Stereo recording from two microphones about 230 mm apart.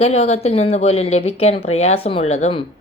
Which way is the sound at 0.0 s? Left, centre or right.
Left.